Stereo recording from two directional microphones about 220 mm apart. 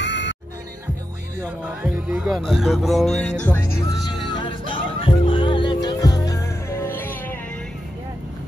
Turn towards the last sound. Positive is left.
turn(degrees=10)  # may be behind; listen again after turning